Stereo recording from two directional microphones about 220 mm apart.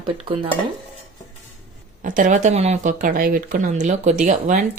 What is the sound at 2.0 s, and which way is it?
Speech, 35° right (ahead or behind).